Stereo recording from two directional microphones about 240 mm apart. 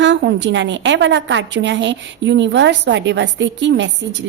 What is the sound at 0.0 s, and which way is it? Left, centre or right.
A woman's voice, right.